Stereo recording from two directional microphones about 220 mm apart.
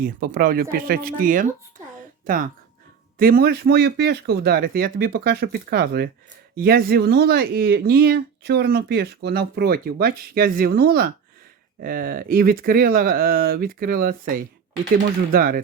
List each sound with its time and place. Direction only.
0.0 s speech: 40° right (ahead or behind)
2.0 s a sound: 40° right (ahead or behind)
3.2 s speech: 40° right (ahead or behind)